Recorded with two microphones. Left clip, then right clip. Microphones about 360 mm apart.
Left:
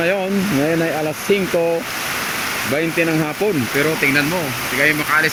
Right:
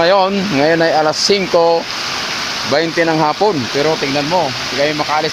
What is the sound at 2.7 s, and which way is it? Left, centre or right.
Speech, right.